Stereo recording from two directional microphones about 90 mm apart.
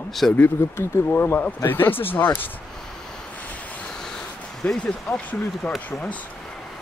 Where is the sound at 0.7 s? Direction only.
25° left (ahead or behind).